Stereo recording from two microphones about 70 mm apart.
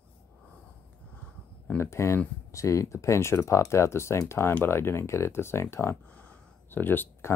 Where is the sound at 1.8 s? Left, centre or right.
Left.